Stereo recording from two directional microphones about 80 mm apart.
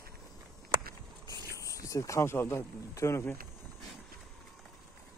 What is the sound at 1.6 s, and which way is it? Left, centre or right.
Speech, left.